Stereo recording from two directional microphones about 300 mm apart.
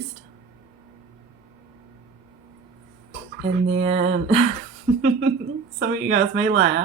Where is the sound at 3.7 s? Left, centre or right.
Right.